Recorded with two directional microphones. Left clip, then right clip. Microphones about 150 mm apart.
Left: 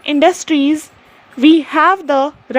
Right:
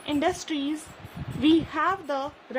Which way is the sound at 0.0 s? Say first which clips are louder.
Left 14 dB; 55° left (ahead or behind).